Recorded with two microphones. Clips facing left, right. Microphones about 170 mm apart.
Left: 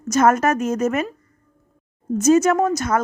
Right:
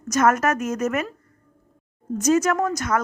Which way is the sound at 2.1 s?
25° left (ahead or behind).